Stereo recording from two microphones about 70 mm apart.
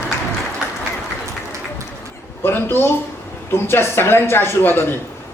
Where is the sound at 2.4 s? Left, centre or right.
Left.